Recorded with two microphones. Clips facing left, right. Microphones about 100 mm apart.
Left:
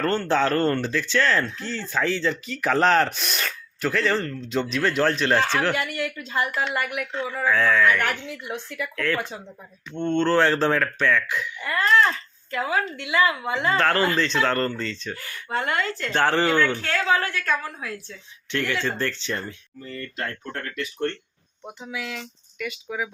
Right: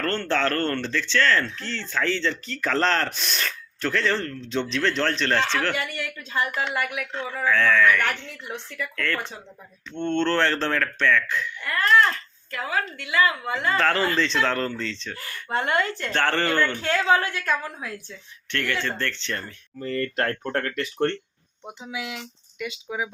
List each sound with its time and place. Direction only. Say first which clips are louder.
0.0 s speech: left 3 dB; 10° left (ahead or behind)
12.5 s a woman's voice: left 3 dB; 20° left (ahead or behind)
13.7 s speech: even; centre (ahead or behind)
15.2 s a woman's voice: right 1 dB; 30° right (ahead or behind)
16.1 s speech: left 3 dB; 10° left (ahead or behind)
16.7 s a woman's voice: right 2 dB; 20° right (ahead or behind)
18.5 s speech: left 2 dB; 15° left (ahead or behind)
19.8 s speech: right 7 dB; 65° right (ahead or behind)
21.9 s a woman's voice: even; 20° right (ahead or behind)